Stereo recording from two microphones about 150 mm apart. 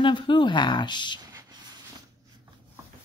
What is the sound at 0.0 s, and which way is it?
A woman's voice, 30° left (ahead or behind).